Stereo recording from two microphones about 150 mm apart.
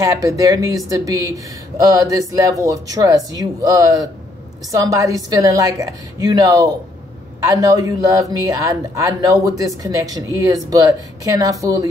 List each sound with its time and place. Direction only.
0.0 s speech: 20° right (ahead or behind)